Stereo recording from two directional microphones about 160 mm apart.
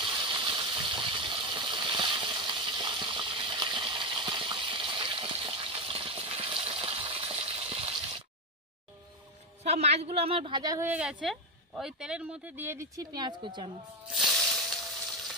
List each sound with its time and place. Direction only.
0.0 s a sound: 30° right (ahead or behind)
9.6 s a man's voice: 40° right (ahead or behind); by 10.9 s 20° right (ahead or behind)
10.9 s speech: 5° right (ahead or behind); by 13.7 s 30° right (ahead or behind)